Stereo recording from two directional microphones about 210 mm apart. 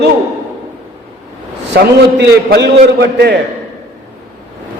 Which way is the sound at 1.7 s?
55° right (ahead or behind).